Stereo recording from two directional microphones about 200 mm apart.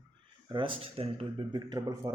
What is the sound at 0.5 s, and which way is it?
Speech, 25° right (ahead or behind).